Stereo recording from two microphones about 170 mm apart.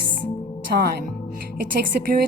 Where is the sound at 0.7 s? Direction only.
65° right (ahead or behind).